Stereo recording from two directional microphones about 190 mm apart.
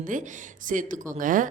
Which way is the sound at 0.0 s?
45° right (ahead or behind).